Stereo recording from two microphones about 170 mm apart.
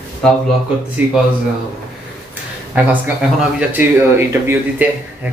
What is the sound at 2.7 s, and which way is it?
Speech, 10° right (ahead or behind).